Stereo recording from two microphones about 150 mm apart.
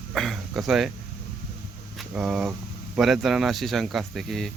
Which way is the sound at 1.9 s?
5° right (ahead or behind).